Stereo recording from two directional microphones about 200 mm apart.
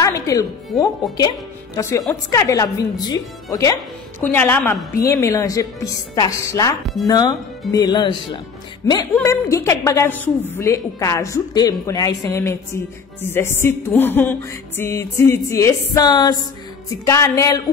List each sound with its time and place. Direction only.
0.0 s speech: 15° left (ahead or behind)
1.8 s music: 15° left (ahead or behind)
7.1 s speech: 20° left (ahead or behind)
9.2 s music: 15° left (ahead or behind)